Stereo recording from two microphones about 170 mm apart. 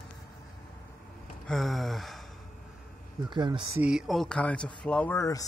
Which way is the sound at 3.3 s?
25° right (ahead or behind).